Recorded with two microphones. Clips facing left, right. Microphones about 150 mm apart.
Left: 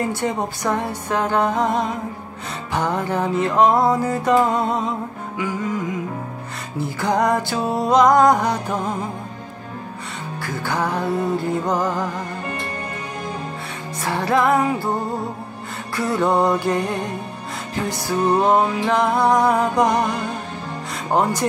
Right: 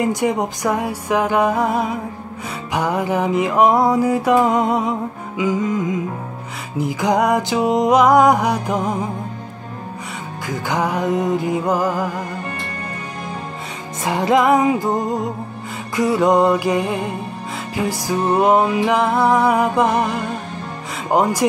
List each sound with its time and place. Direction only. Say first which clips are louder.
0.0 s music: right 4 dB; 10° right (ahead or behind)
10.4 s music: right 3 dB; 15° right (ahead or behind)
14.0 s music: right 3 dB; 15° right (ahead or behind)